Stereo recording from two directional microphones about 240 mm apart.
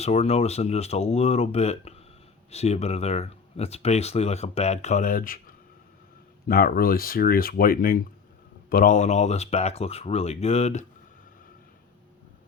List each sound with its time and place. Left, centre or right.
0.0 s speech: left